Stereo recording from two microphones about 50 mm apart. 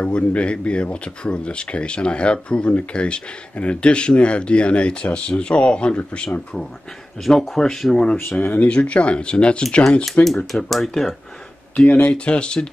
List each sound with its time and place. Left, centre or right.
0.0 s speech: left
8.5 s speech: left
10.2 s speech: centre
11.7 s speech: left